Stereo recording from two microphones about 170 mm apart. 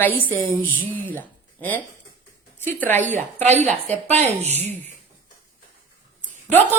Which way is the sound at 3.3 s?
40° right (ahead or behind).